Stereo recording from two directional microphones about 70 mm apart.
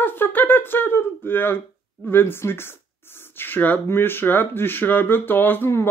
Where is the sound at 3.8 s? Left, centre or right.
Left.